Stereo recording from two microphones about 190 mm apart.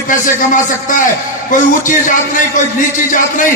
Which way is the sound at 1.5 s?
45° left (ahead or behind).